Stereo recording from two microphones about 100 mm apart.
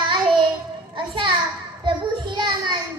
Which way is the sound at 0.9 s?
55° right (ahead or behind).